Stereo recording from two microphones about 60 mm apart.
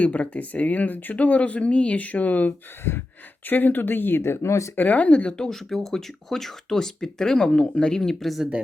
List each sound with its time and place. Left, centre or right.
0.0 s speech: left
4.7 s speech: left
5.5 s speech: centre